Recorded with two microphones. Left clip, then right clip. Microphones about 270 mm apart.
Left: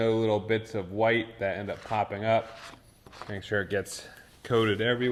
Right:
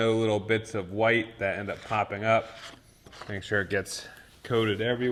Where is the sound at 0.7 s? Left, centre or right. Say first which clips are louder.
Even; right.